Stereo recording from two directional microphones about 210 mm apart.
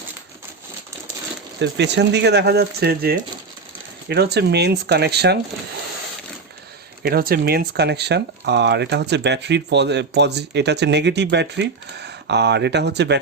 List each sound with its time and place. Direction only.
1.5 s speech: 55° right (ahead or behind)
7.0 s speech: 45° right (ahead or behind)